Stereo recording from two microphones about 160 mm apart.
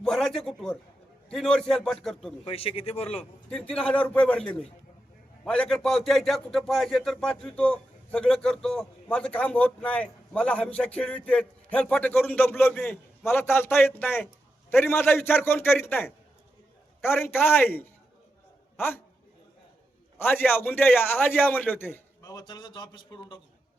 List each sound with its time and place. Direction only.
0.0 s a man's voice: 5° left (ahead or behind)
2.5 s speech: 35° left (ahead or behind)
3.5 s a man's voice: 5° left (ahead or behind)
13.2 s a man's voice: 15° left (ahead or behind)
20.1 s a man's voice: 10° left (ahead or behind); by 23.4 s 30° left (ahead or behind)